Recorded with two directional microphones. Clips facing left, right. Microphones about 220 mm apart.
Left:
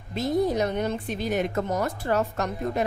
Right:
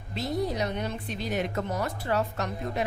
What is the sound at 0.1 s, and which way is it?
A woman's voice, 50° left (ahead or behind).